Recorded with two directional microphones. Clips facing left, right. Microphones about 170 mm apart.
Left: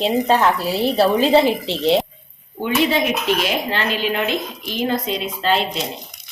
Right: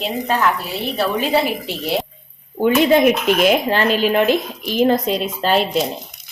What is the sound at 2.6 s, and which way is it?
Speech, 50° right (ahead or behind).